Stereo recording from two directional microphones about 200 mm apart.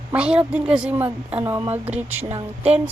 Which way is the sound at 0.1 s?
5° right (ahead or behind).